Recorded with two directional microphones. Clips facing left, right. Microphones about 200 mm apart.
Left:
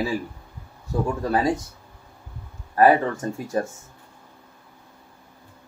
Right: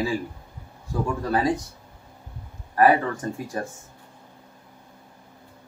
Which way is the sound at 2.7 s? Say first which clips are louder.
Left 2 dB; 25° left (ahead or behind).